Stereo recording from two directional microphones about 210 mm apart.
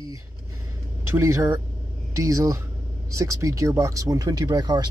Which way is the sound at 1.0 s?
15° right (ahead or behind).